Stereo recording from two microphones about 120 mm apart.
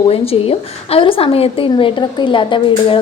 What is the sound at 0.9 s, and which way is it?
A woman's voice, 50° left (ahead or behind).